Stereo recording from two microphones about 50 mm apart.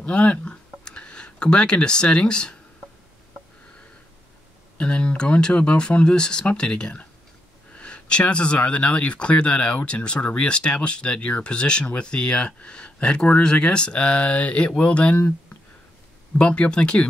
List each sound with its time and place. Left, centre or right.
0.0 s speech: left
4.7 s speech: left
16.3 s speech: left